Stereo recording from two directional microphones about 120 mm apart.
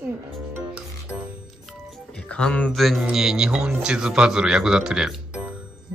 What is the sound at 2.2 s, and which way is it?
A man's voice, 10° left (ahead or behind).